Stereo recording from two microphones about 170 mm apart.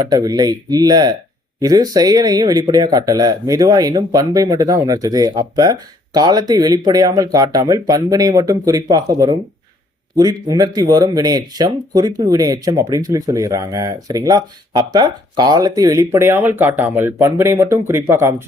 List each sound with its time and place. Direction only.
0.1 s speech: 20° right (ahead or behind)